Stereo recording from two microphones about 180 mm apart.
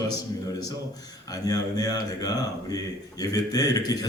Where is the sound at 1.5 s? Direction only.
20° left (ahead or behind).